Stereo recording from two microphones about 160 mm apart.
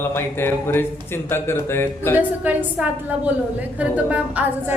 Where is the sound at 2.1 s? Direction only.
10° right (ahead or behind).